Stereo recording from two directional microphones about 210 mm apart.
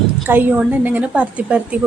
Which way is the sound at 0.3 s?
10° right (ahead or behind).